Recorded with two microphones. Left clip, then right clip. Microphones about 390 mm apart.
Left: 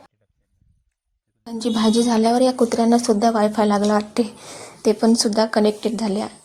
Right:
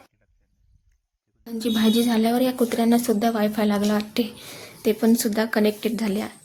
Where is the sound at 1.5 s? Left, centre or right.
Right.